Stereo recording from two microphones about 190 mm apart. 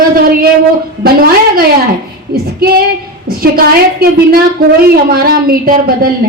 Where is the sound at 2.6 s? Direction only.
55° right (ahead or behind).